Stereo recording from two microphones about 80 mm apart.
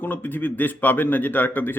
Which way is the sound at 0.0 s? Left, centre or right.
Left.